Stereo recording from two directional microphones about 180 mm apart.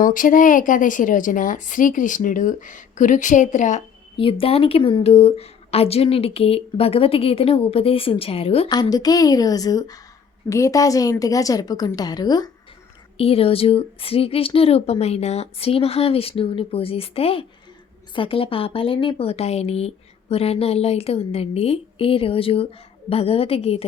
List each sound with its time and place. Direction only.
0.0 s a woman's voice: 50° left (ahead or behind)
4.2 s a woman's voice: 30° left (ahead or behind)
8.8 s a woman's voice: 20° left (ahead or behind)
13.1 s a woman's voice: 30° left (ahead or behind)